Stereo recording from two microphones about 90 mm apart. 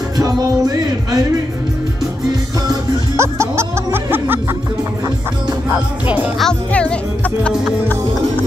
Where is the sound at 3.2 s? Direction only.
30° right (ahead or behind).